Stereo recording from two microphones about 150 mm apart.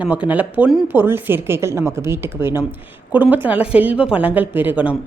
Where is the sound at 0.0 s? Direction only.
10° right (ahead or behind).